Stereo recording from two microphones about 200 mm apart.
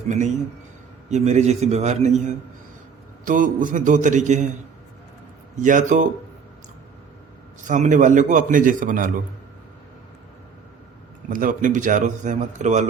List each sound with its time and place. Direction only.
1.1 s a man's voice: 35° right (ahead or behind)
5.5 s a man's voice: 40° right (ahead or behind)
7.7 s a man's voice: 40° right (ahead or behind)
11.3 s a man's voice: 45° right (ahead or behind)